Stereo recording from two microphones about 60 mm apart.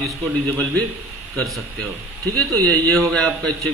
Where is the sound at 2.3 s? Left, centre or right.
Left.